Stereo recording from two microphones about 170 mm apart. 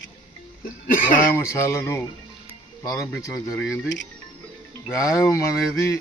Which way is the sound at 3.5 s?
5° right (ahead or behind).